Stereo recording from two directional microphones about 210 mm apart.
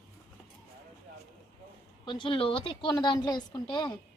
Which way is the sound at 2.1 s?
25° left (ahead or behind).